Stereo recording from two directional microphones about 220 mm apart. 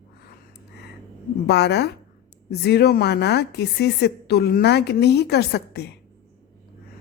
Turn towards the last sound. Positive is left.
turn(degrees=50)  # may be behind; listen again after turning